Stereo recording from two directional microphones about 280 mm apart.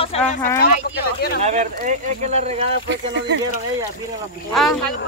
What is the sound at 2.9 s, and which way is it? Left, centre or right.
Speech, right.